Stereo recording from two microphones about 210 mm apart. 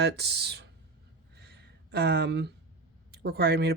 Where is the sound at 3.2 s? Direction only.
50° right (ahead or behind).